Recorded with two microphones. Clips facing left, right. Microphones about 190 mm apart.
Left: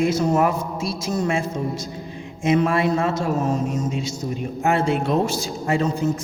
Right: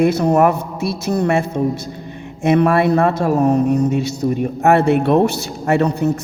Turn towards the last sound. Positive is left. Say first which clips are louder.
# right 5 dB
turn(degrees=-65)  # may be behind; listen again after turning